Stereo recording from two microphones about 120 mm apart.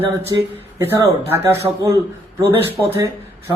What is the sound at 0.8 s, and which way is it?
Speech, 20° right (ahead or behind).